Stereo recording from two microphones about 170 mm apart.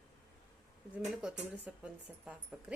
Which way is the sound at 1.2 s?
5° right (ahead or behind).